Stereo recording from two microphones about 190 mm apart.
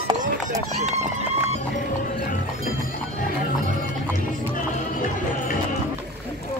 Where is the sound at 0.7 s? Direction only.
35° right (ahead or behind).